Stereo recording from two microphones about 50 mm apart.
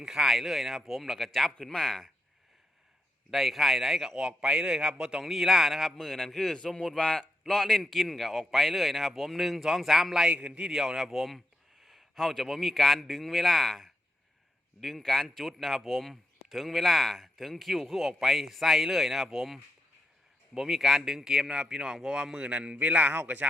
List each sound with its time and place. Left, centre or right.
0.0 s a man's voice: centre
3.2 s a man's voice: centre
6.0 s a man's voice: centre
10.2 s a man's voice: right
10.7 s a man's voice: centre
22.4 s a man's voice: right